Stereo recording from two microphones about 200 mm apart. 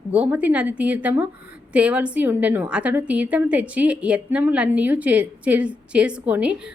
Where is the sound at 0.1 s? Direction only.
5° right (ahead or behind).